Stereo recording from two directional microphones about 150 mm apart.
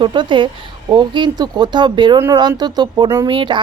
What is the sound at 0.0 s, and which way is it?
Speech, 35° right (ahead or behind).